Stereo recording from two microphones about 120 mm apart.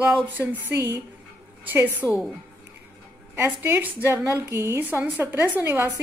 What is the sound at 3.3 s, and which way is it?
A woman's voice, 15° right (ahead or behind).